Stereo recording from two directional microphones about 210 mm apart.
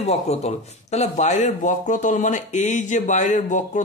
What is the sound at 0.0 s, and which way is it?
Speech, 30° left (ahead or behind).